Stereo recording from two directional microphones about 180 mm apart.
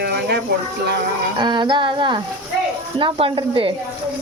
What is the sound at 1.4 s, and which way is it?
A woman's voice, 25° right (ahead or behind).